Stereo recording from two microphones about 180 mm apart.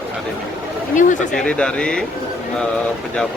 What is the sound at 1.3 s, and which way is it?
Speech, 5° left (ahead or behind).